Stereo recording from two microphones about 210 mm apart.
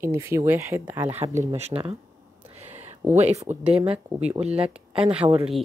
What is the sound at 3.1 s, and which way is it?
Speech, 30° right (ahead or behind).